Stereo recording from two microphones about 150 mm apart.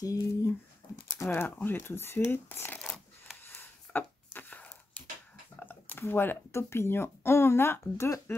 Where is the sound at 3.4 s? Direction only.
15° left (ahead or behind).